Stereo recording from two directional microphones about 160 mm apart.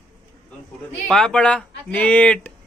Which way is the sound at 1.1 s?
5° left (ahead or behind).